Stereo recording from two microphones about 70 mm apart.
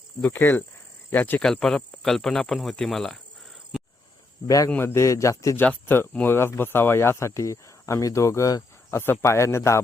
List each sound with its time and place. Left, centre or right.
0.2 s speech: left
1.4 s speech: centre
3.7 s a sound: centre
4.4 s a man's voice: left
4.8 s speech: left
5.0 s speech: left
5.8 s speech: left